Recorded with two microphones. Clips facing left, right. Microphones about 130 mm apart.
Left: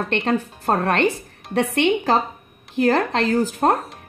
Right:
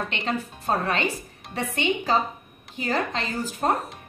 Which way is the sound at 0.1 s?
55° left (ahead or behind).